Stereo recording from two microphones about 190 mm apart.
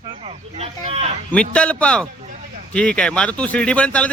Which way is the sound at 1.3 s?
5° left (ahead or behind).